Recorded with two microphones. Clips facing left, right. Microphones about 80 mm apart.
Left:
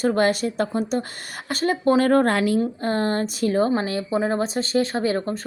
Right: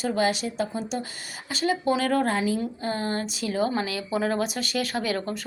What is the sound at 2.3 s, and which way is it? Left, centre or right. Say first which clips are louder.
Speech: left 4 dB; left.